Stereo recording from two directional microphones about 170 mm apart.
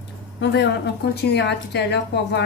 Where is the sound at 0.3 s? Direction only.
90° left.